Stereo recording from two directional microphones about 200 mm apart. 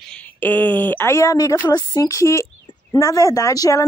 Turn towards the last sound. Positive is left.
turn(degrees=15)  # may be behind; listen again after turning